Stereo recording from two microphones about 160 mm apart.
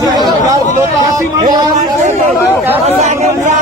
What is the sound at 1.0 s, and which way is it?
Speech, 25° right (ahead or behind).